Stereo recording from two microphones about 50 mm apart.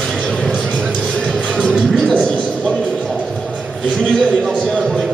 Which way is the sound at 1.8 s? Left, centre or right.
Centre.